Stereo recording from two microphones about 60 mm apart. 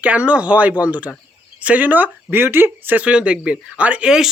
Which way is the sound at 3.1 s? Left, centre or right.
Centre.